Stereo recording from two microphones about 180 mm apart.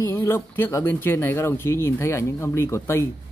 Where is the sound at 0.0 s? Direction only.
15° left (ahead or behind).